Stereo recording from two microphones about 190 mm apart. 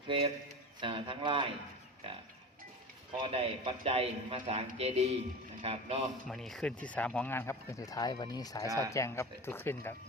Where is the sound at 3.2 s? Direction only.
30° right (ahead or behind).